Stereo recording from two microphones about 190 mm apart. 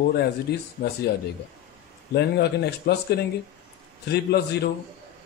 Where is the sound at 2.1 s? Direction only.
60° left (ahead or behind).